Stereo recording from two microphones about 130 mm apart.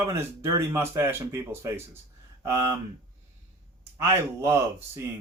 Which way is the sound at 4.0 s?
20° right (ahead or behind).